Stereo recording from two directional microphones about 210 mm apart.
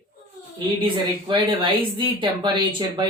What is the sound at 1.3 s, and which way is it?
Speech, 25° right (ahead or behind).